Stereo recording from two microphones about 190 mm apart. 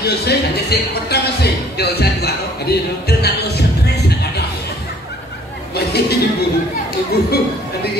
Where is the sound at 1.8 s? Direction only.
60° left (ahead or behind).